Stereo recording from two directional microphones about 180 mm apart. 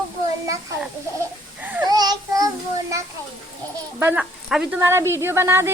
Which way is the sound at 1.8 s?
20° right (ahead or behind).